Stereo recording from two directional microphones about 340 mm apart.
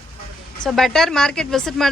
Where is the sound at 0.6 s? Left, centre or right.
Centre.